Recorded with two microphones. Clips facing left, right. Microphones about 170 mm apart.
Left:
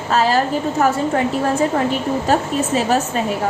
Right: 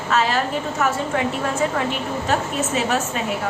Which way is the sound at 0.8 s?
35° left (ahead or behind).